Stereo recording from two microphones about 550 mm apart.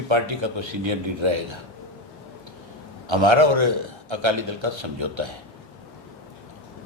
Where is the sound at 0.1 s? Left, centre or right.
Right.